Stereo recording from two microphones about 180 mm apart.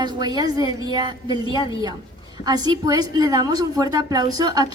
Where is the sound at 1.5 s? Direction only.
25° left (ahead or behind).